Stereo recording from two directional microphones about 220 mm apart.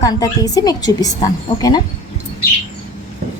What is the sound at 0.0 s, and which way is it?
A woman's voice, 15° left (ahead or behind).